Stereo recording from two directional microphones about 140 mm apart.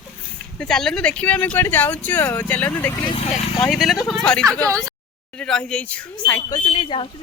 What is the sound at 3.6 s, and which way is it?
Speech, centre (ahead or behind).